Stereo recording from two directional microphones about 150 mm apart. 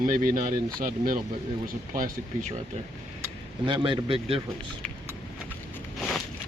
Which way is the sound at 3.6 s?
30° right (ahead or behind).